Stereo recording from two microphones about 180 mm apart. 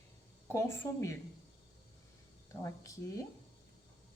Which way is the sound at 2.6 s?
20° left (ahead or behind).